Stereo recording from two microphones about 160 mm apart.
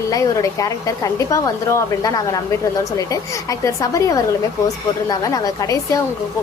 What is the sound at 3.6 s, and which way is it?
A woman's voice, 20° left (ahead or behind).